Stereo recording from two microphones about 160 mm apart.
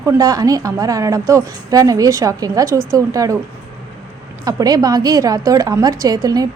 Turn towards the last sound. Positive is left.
turn(degrees=-25)  # may be behind; listen again after turning